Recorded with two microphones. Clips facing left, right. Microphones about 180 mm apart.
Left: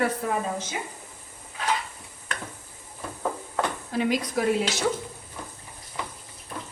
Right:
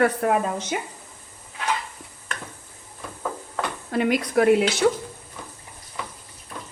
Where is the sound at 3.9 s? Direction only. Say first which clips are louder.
Right 5 dB; 60° right (ahead or behind).